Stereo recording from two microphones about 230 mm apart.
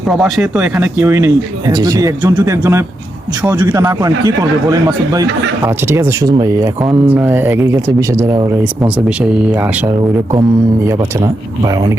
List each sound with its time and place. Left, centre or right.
0.1 s speech: centre